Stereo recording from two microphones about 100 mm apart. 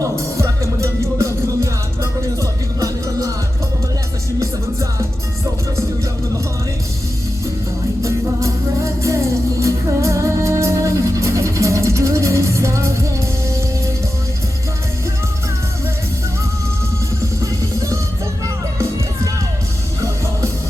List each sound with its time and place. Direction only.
0.0 s music: 30° right (ahead or behind)
4.4 s music: 30° right (ahead or behind)
8.0 s music: 30° right (ahead or behind)
17.4 s music: 35° right (ahead or behind)